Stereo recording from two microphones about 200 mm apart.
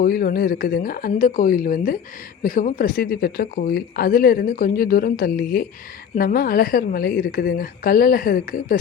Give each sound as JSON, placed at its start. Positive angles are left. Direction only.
{"t": 0.0, "sound": "speech", "side_deg": 45}